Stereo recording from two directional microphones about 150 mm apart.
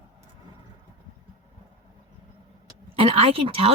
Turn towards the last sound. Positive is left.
turn(degrees=-40)  # may be behind; listen again after turning